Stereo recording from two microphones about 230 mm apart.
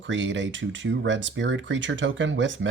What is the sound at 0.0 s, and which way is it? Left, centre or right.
Speech, right.